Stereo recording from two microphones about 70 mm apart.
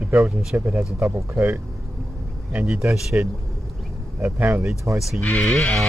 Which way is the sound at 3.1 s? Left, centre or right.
Right.